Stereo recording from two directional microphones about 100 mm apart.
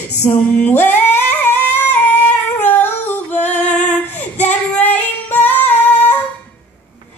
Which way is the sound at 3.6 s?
10° left (ahead or behind).